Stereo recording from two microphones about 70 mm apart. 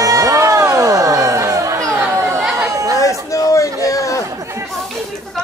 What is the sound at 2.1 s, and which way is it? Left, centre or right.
Chatter, right.